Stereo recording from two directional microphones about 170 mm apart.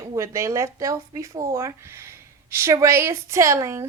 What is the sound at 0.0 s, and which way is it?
A woman's voice, 20° right (ahead or behind).